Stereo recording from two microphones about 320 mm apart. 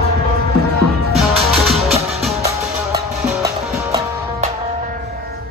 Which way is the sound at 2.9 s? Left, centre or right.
Centre.